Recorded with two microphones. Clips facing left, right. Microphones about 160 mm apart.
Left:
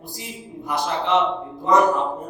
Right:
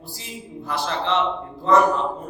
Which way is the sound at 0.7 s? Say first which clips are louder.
Left 2 dB; 15° left (ahead or behind).